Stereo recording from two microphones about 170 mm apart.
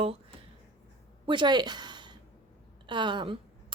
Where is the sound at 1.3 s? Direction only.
25° right (ahead or behind).